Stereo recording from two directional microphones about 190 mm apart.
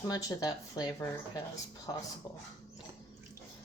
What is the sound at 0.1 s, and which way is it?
Speech, 20° left (ahead or behind).